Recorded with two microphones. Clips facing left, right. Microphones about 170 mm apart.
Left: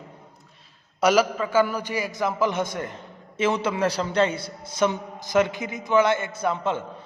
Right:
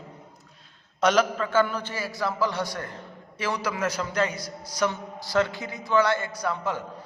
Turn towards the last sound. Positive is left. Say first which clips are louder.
# left 3 dB
turn(degrees=25)  # may be behind; listen again after turning